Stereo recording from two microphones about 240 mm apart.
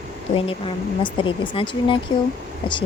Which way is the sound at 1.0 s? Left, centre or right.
Left.